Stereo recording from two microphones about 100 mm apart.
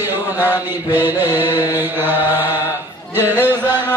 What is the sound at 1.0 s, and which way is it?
Mantra, 20° right (ahead or behind).